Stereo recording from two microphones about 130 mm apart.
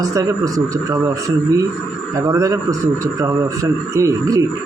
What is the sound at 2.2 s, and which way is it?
A man's voice, 25° right (ahead or behind).